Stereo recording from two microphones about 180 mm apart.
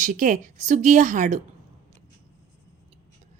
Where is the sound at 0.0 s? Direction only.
45° right (ahead or behind).